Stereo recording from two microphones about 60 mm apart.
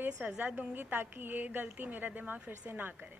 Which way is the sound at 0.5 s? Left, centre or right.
Right.